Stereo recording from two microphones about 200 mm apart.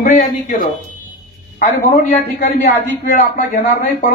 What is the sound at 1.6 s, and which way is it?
A man's voice, 40° left (ahead or behind).